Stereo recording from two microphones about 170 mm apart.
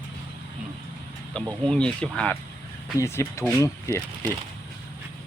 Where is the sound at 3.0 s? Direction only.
15° left (ahead or behind).